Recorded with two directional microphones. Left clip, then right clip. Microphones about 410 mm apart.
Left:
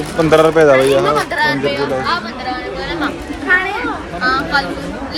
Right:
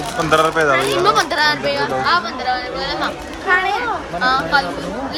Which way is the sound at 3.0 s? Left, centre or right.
Right.